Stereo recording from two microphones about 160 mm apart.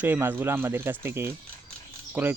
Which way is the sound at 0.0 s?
10° right (ahead or behind).